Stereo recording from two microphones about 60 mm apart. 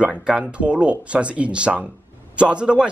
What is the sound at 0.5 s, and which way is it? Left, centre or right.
A man's voice, centre.